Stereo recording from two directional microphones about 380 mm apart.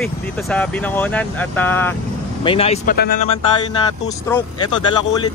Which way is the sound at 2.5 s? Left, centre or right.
Centre.